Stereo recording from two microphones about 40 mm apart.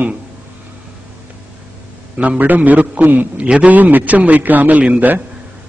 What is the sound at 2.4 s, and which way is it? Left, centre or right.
Speech, right.